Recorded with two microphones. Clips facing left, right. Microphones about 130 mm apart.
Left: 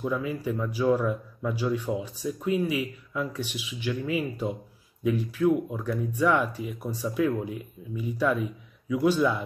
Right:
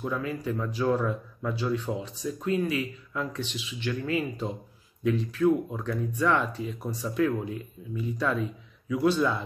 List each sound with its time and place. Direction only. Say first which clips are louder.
0.0 s speech: left 2 dB; 10° left (ahead or behind)